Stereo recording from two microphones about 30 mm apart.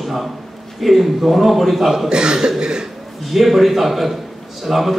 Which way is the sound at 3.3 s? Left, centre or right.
Centre.